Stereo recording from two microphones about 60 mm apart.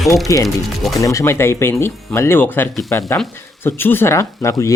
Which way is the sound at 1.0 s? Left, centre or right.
Left.